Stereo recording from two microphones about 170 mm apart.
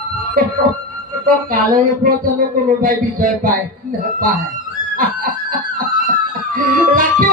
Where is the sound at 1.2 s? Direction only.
55° right (ahead or behind).